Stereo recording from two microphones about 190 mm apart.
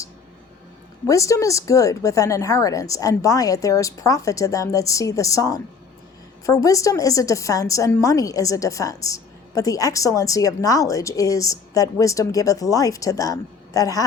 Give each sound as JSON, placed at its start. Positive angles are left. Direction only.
{"t": 1.0, "sound": "a woman's voice", "side_deg": 15}